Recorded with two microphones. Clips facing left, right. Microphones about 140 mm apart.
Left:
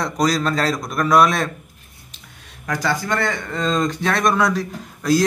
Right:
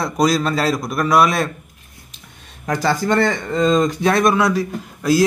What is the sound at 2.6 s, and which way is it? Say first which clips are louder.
Speech: right 4 dB; 25° right (ahead or behind).